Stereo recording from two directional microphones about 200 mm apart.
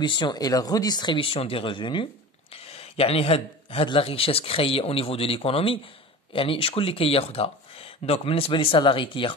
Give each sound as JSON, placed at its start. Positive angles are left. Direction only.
{"t": 0.0, "sound": "a man's voice", "side_deg": 25}